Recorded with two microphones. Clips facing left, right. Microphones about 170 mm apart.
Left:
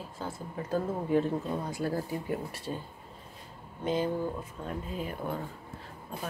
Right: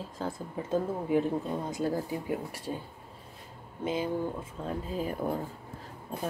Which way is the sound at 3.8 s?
10° right (ahead or behind).